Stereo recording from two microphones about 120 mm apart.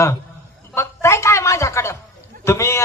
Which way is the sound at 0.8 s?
25° left (ahead or behind).